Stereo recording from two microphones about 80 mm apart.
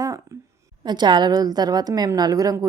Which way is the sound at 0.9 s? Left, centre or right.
Right.